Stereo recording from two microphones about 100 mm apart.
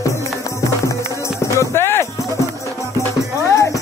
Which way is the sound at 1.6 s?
25° left (ahead or behind).